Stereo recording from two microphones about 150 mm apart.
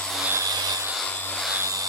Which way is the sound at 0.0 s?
Centre (ahead or behind).